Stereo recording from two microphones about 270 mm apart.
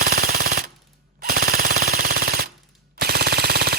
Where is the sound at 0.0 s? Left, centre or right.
Right.